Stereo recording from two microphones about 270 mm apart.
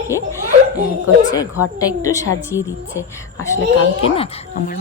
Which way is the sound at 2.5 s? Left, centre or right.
Centre.